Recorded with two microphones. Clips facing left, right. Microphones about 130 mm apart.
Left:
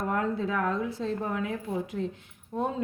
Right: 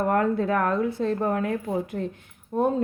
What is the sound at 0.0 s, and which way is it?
A woman's voice, 60° right (ahead or behind).